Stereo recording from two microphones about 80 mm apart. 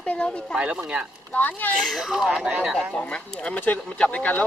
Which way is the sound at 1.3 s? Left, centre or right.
Left.